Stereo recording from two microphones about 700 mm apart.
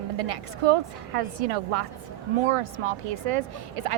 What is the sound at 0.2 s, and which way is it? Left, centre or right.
Speech, right.